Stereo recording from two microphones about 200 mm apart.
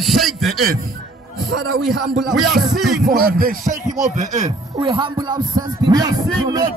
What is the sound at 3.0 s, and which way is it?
Music, 45° right (ahead or behind).